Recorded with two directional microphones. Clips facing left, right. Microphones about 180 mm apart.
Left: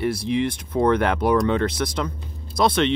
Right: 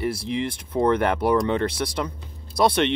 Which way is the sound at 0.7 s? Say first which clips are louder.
Left 1 dB; 30° right (ahead or behind).